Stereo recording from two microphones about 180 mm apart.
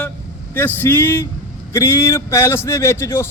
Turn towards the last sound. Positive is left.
turn(degrees=15)  # may be behind; listen again after turning